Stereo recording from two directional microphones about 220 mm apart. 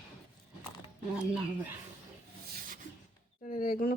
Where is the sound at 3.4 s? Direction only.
40° left (ahead or behind).